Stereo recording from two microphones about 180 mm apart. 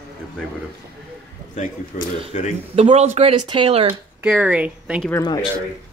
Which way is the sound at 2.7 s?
35° right (ahead or behind).